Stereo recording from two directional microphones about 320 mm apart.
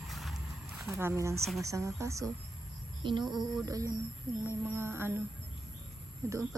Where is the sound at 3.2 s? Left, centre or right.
Centre.